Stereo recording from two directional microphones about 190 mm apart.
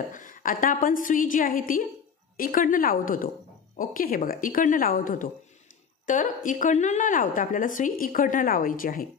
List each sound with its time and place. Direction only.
0.1 s a woman's voice: 45° left (ahead or behind)